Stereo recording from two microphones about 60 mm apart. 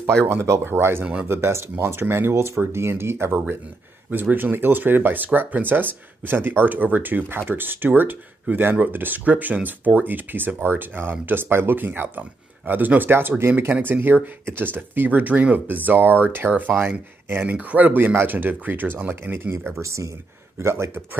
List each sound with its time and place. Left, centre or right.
0.2 s speech: right
4.1 s speech: right
17.5 s speech: right
19.3 s speech: right
19.8 s speech: right